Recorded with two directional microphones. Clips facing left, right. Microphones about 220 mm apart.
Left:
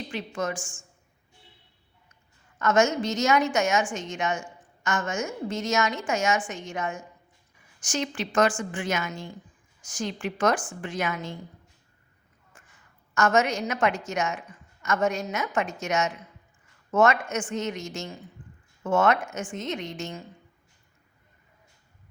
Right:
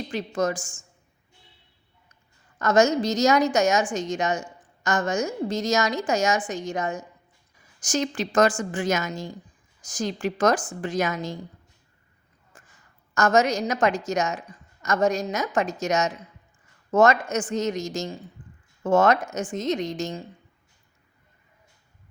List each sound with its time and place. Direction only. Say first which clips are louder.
0.1 s a woman's voice: right 6 dB; 40° right (ahead or behind)
2.6 s a woman's voice: right 3 dB; 35° right (ahead or behind)
12.5 s a sound: right 3 dB; 35° right (ahead or behind)
13.1 s a woman's voice: right 3 dB; 35° right (ahead or behind)
18.4 s a sound: even; 35° right (ahead or behind)
18.8 s a woman's voice: right 3 dB; 35° right (ahead or behind)